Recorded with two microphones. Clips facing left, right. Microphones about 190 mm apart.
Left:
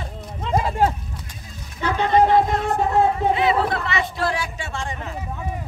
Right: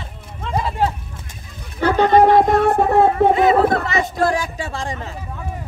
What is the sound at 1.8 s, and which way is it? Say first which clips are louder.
Speech: right 5 dB; 60° right (ahead or behind).